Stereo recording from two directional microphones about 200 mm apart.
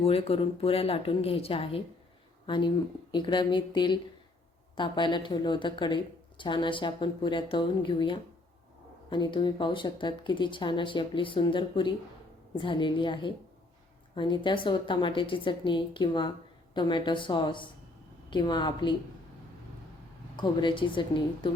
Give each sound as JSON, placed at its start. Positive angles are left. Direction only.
{"t": 0.0, "sound": "speech", "side_deg": 30}
{"t": 20.3, "sound": "speech", "side_deg": 25}